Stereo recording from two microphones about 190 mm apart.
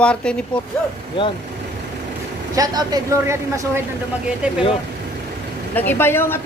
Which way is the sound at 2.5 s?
20° right (ahead or behind).